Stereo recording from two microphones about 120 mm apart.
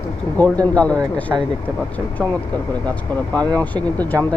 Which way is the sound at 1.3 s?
20° right (ahead or behind).